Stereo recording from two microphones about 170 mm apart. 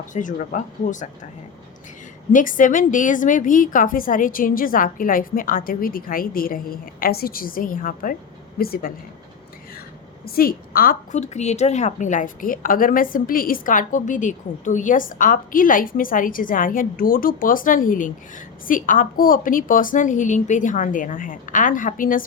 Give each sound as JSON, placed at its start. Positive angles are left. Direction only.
{"t": 0.1, "sound": "a woman's voice", "side_deg": 50}
{"t": 2.3, "sound": "a woman's voice", "side_deg": 50}
{"t": 10.2, "sound": "a woman's voice", "side_deg": 60}